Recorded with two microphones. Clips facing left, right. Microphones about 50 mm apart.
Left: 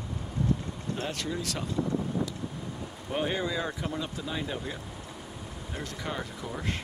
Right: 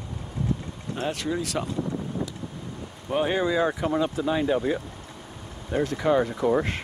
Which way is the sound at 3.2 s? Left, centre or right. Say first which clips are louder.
Right 7 dB; right.